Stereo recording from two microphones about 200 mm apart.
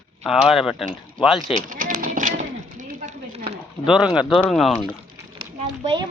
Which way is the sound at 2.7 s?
40° right (ahead or behind).